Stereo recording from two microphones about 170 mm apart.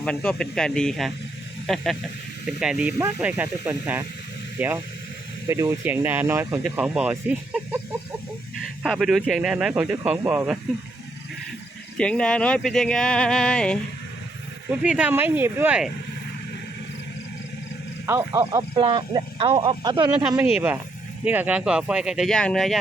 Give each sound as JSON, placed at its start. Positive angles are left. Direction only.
{"t": 0.0, "sound": "speech", "side_deg": 5}
{"t": 8.8, "sound": "speech", "side_deg": -5}
{"t": 11.9, "sound": "speech", "side_deg": 5}
{"t": 14.7, "sound": "speech", "side_deg": -5}
{"t": 18.0, "sound": "speech", "side_deg": -15}
{"t": 20.4, "sound": "speech", "side_deg": -10}